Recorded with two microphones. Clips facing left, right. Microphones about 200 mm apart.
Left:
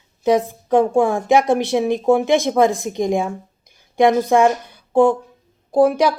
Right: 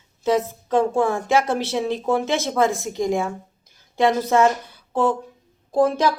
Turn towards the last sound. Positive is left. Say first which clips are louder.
# left 4 dB
turn(degrees=10)  # may be behind; listen again after turning